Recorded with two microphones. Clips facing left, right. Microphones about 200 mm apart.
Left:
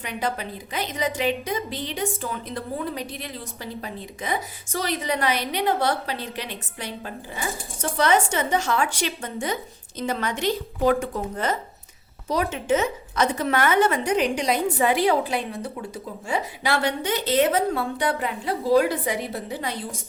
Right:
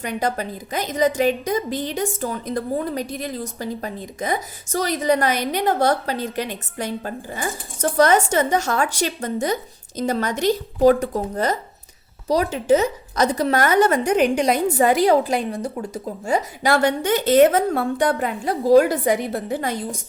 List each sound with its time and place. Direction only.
0.0 s a woman's voice: 45° right (ahead or behind)